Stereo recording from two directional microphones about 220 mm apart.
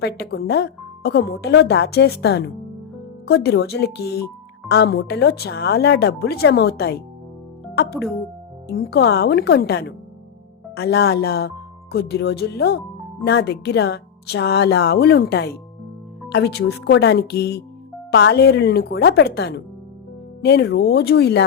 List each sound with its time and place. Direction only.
0.0 s speech: 45° left (ahead or behind)